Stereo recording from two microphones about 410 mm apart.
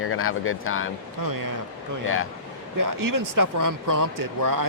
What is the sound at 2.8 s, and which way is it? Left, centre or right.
Speech, right.